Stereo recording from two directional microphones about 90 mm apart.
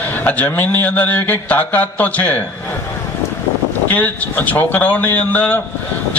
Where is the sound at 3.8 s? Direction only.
20° left (ahead or behind).